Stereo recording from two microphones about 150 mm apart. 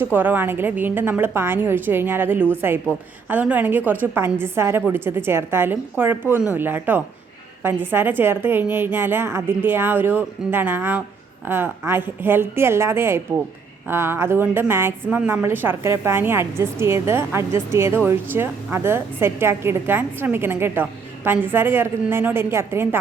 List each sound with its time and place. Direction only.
0.0 s a woman's voice: 15° right (ahead or behind)